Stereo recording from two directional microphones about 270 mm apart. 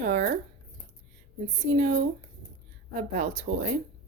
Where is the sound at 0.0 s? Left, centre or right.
Right.